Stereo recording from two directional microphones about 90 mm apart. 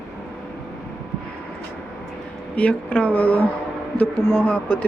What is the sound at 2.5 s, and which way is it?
Speech, 15° left (ahead or behind).